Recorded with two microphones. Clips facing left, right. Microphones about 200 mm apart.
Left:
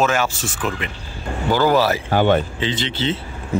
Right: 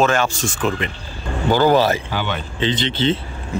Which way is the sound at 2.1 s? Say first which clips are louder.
Left 9 dB; 50° left (ahead or behind).